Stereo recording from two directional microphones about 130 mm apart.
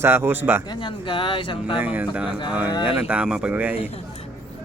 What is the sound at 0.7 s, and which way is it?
Speech, 40° left (ahead or behind).